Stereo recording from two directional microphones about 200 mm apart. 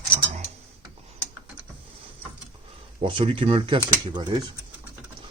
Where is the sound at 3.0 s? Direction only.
25° right (ahead or behind).